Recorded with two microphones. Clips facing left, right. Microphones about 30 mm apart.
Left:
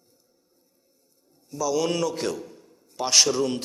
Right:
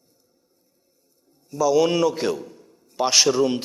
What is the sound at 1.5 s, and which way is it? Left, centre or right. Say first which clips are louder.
Speech: right 6 dB; centre.